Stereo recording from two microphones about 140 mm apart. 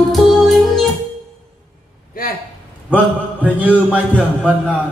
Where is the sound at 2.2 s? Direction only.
90° left.